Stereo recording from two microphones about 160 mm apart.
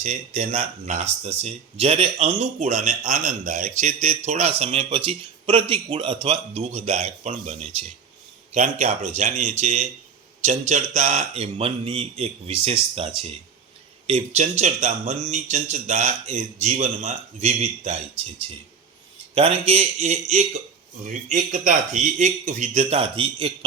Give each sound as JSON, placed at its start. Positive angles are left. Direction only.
{"t": 0.0, "sound": "a man's voice", "side_deg": -45}
{"t": 19.3, "sound": "a man's voice", "side_deg": -35}